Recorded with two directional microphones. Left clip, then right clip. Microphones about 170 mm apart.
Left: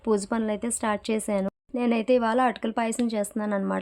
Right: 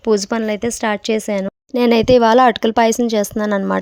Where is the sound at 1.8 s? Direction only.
50° right (ahead or behind).